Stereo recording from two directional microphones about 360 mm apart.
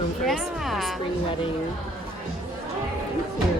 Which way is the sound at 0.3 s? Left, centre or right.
Centre.